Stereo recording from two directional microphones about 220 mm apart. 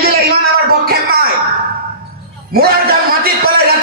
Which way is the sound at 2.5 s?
45° right (ahead or behind).